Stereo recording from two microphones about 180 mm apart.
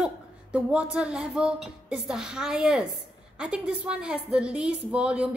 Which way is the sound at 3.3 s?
5° right (ahead or behind).